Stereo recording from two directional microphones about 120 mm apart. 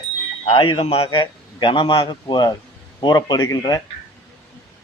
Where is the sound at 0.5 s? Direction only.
40° left (ahead or behind).